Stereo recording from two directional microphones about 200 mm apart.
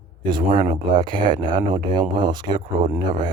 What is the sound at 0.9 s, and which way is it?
Speech, 25° right (ahead or behind).